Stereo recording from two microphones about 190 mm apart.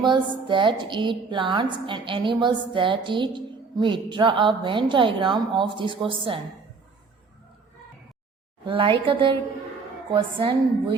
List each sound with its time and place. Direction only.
0.0 s a woman's voice: 25° right (ahead or behind)
8.6 s a woman's voice: 25° right (ahead or behind)